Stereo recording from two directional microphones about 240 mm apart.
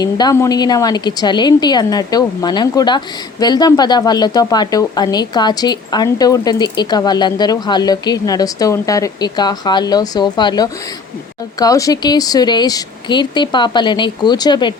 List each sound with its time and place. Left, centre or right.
0.0 s speech: centre